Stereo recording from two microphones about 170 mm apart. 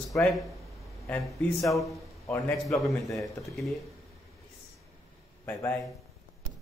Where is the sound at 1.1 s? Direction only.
Centre (ahead or behind).